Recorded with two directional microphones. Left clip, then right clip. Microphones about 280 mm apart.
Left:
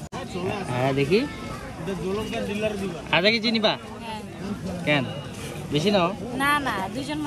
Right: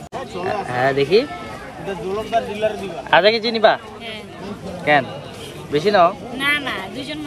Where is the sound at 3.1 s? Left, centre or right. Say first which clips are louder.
Right 7 dB; centre.